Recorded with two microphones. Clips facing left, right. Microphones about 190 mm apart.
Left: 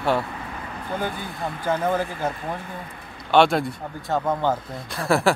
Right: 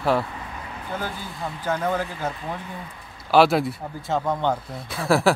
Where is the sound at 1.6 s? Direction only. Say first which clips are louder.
Left 2 dB; 10° left (ahead or behind).